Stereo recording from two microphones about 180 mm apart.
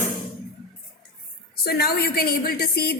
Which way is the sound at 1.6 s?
60° left (ahead or behind).